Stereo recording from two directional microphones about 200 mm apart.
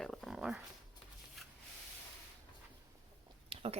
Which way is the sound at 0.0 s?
Centre (ahead or behind).